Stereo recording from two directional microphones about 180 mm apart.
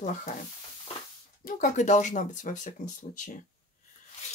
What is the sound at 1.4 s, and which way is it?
Speech, 45° left (ahead or behind).